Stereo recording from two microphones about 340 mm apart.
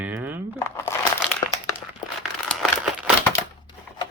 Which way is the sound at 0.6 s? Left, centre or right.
Centre.